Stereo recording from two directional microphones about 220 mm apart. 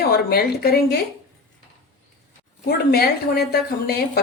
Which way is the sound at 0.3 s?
45° left (ahead or behind).